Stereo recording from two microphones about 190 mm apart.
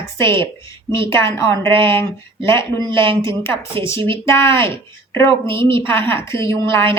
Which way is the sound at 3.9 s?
25° right (ahead or behind).